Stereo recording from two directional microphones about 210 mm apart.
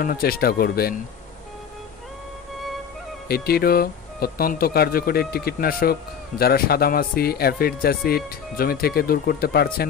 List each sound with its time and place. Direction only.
0.0 s speech: 45° left (ahead or behind)
3.3 s speech: 50° left (ahead or behind)